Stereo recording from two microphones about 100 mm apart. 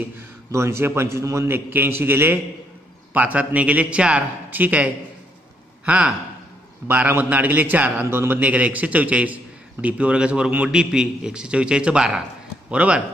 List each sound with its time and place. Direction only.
0.5 s a man's voice: 25° right (ahead or behind)